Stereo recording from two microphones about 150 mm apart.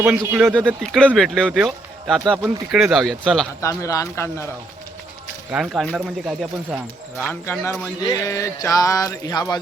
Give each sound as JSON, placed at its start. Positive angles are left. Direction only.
{"t": 0.0, "sound": "speech", "side_deg": -10}
{"t": 0.4, "sound": "speech", "side_deg": 5}
{"t": 3.6, "sound": "speech", "side_deg": 20}
{"t": 5.5, "sound": "speech", "side_deg": -5}
{"t": 7.2, "sound": "speech", "side_deg": 15}